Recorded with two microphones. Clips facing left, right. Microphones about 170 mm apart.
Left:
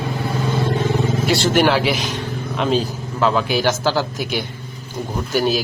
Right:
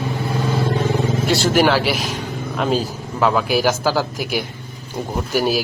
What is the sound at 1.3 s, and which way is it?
A man's voice, 5° right (ahead or behind).